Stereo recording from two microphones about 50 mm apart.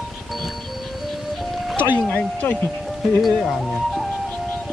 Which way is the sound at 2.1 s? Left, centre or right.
Left.